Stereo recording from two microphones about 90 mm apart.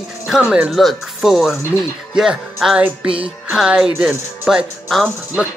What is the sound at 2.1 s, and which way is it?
Speech, 5° right (ahead or behind).